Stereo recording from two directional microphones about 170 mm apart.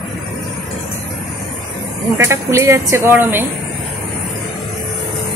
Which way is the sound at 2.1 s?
15° right (ahead or behind).